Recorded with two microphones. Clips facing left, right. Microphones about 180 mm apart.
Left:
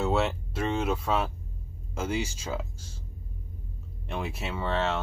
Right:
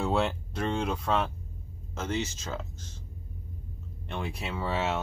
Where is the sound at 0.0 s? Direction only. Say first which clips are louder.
Left 1 dB; centre (ahead or behind).